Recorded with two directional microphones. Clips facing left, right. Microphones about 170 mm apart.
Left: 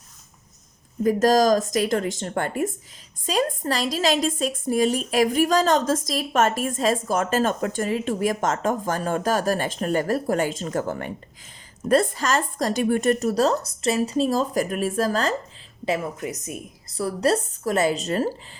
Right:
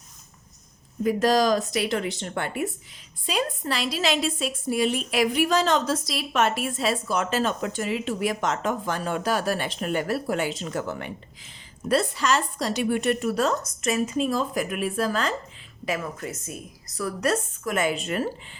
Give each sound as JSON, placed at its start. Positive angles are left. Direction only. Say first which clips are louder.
{"t": 1.0, "sound": "a woman's voice", "louder": "left 3 dB", "side_deg": 45}
{"t": 15.9, "sound": "a woman's voice", "louder": "left 4 dB", "side_deg": 20}